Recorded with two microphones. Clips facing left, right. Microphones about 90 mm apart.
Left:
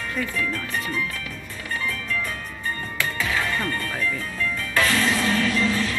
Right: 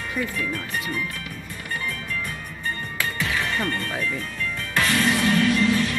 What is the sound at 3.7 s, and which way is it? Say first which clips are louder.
Speech: even; 20° right (ahead or behind).